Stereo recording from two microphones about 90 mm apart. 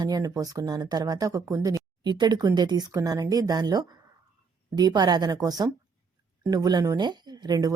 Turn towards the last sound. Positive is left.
turn(degrees=-45)  # may be behind; listen again after turning